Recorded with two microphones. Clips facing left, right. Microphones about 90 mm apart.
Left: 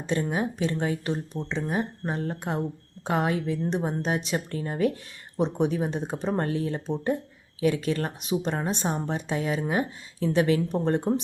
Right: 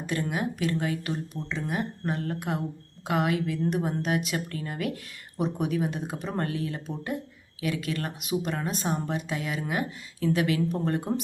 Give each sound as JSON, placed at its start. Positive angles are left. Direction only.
{"t": 0.0, "sound": "a woman's voice", "side_deg": 30}